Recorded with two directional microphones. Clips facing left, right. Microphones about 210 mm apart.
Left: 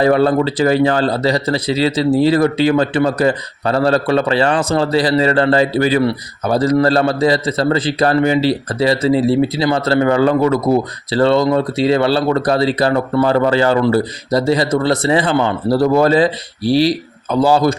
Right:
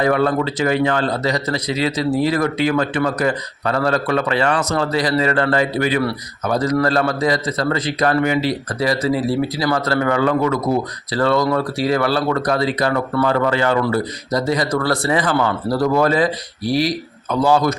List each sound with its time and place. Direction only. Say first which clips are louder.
0.0 s a man's voice: left 4 dB; 30° left (ahead or behind)